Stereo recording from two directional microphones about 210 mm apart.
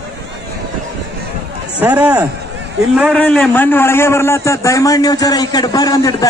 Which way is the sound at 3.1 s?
5° left (ahead or behind).